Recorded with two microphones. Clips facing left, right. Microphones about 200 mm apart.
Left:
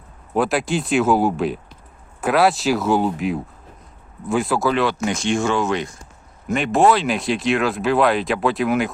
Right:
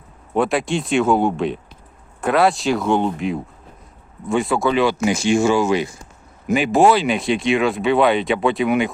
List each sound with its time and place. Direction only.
0.3 s speech: centre (ahead or behind)